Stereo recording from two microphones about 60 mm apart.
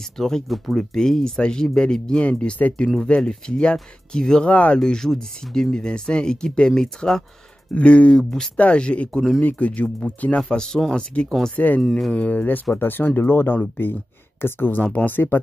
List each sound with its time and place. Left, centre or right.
0.2 s speech: centre; by 2.9 s left
3.0 s speech: centre
4.5 s speech: left
4.7 s speech: centre
7.7 s speech: left
8.5 s speech: left
11.5 s speech: left
14.8 s speech: left